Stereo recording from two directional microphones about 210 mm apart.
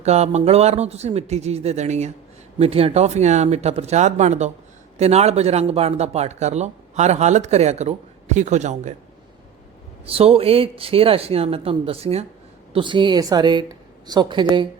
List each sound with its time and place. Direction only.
0.0 s speech: 30° right (ahead or behind)
10.1 s speech: 25° right (ahead or behind)